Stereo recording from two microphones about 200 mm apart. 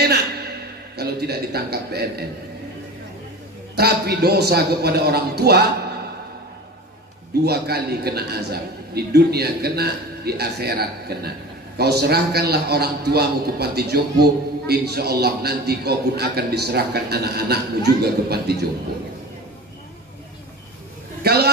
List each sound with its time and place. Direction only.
0.9 s a man's voice: 55° right (ahead or behind)
3.7 s a man's voice: 50° right (ahead or behind)
7.4 s a man's voice: 55° right (ahead or behind)
21.2 s a sound: 50° right (ahead or behind)